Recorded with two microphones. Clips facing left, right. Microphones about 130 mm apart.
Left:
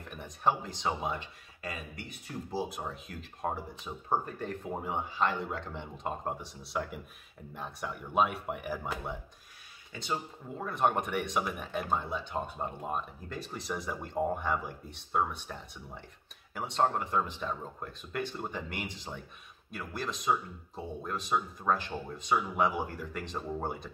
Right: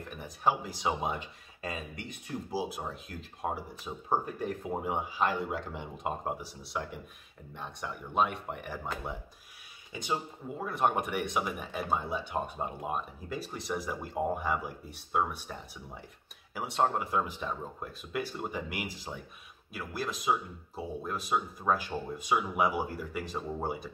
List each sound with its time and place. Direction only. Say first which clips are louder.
0.1 s speech: even; 5° right (ahead or behind)
1.6 s speech: right 3 dB; 25° right (ahead or behind)
2.5 s speech: even; 5° right (ahead or behind)
9.9 s speech: right 2 dB; 15° right (ahead or behind)